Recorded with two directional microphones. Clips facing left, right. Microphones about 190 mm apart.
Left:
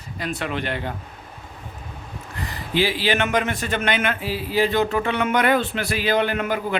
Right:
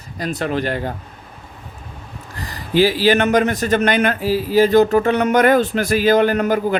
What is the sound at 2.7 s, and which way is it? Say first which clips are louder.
A man's voice: right 7 dB; 40° right (ahead or behind).